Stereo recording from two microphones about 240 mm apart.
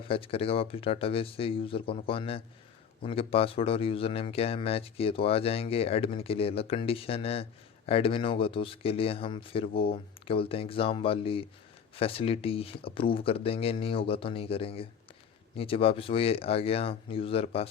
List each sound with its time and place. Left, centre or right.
0.1 s speech: left